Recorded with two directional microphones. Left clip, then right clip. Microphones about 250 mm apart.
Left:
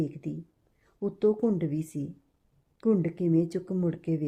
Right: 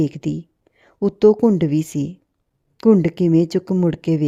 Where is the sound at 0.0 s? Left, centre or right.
Right.